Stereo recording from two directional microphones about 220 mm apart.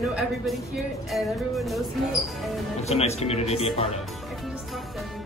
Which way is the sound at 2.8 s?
30° left (ahead or behind).